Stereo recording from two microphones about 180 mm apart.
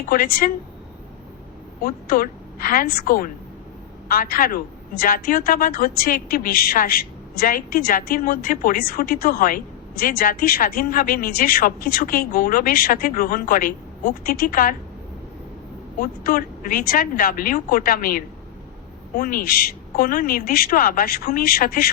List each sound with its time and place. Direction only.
0.1 s a woman's voice: 55° left (ahead or behind)
1.8 s a woman's voice: 55° left (ahead or behind)
16.0 s a woman's voice: 55° left (ahead or behind)